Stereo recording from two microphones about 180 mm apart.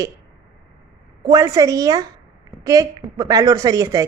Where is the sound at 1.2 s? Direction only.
20° right (ahead or behind).